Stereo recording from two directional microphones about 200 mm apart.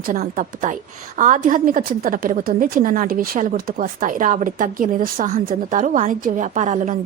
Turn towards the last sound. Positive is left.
turn(degrees=-40)  # may be behind; listen again after turning